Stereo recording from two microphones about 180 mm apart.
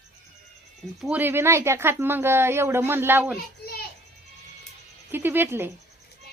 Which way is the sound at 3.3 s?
60° left (ahead or behind).